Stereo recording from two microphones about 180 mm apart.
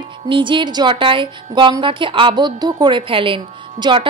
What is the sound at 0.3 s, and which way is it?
A woman's voice, 25° right (ahead or behind).